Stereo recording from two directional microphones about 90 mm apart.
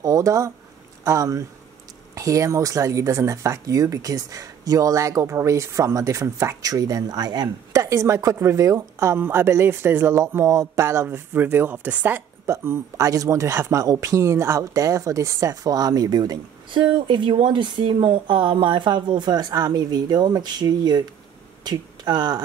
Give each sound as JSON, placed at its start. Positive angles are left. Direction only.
{"t": 0.0, "sound": "speech", "side_deg": -40}
{"t": 7.8, "sound": "speech", "side_deg": -35}
{"t": 12.4, "sound": "speech", "side_deg": -30}
{"t": 17.1, "sound": "speech", "side_deg": -60}